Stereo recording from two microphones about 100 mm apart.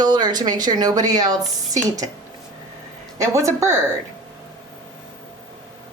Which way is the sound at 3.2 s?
30° right (ahead or behind).